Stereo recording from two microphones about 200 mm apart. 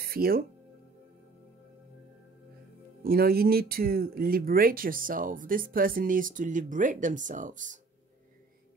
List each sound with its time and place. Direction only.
0.0 s speech: 50° right (ahead or behind)
3.0 s speech: 50° right (ahead or behind)